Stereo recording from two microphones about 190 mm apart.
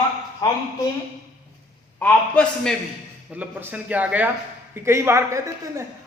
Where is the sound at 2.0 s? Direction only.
5° left (ahead or behind).